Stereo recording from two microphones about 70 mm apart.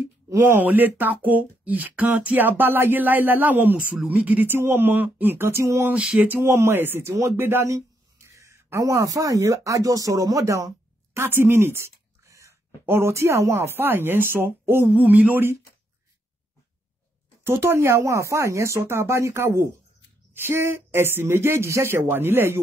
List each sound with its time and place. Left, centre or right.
0.0 s a sound: right
0.6 s speech: right
5.9 s a sound: centre
6.4 s speech: right
7.7 s speech: right
11.1 s speech: right
12.3 s a sound: right
12.8 s speech: right
17.4 s speech: right